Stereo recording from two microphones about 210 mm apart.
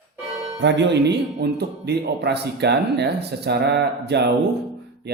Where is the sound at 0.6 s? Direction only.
55° right (ahead or behind).